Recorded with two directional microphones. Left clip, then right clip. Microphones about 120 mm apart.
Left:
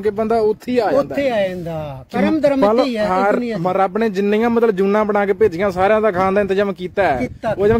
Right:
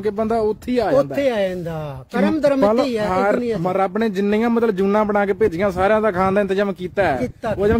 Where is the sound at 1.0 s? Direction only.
65° right (ahead or behind).